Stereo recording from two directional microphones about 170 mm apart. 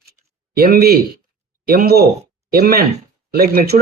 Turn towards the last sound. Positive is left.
turn(degrees=-60)  # may be behind; listen again after turning